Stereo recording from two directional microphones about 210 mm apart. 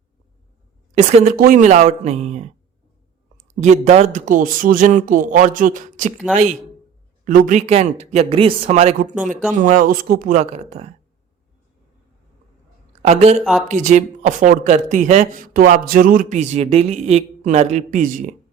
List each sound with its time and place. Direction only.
1.4 s speech: 40° right (ahead or behind)
3.6 s speech: 30° right (ahead or behind)
13.0 s speech: 30° right (ahead or behind)
13.4 s speech: centre (ahead or behind)
13.7 s speech: 35° right (ahead or behind)